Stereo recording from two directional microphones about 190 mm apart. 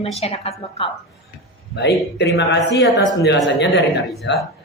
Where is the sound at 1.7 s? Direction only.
65° left (ahead or behind).